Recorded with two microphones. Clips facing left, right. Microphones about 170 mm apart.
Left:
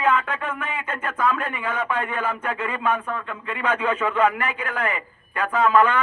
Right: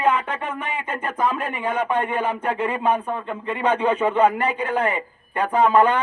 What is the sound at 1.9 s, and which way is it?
Speech, 30° right (ahead or behind).